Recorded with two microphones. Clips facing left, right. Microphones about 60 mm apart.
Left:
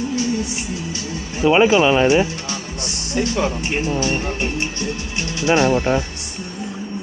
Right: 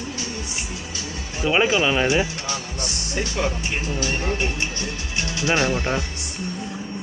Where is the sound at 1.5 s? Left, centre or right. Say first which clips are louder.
Left 6 dB; centre.